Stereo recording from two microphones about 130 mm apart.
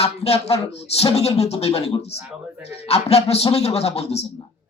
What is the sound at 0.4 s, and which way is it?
A man's voice, 50° left (ahead or behind).